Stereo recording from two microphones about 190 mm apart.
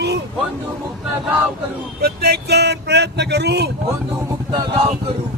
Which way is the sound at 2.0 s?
55° right (ahead or behind).